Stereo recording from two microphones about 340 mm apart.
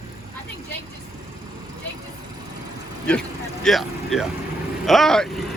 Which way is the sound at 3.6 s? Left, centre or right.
Centre.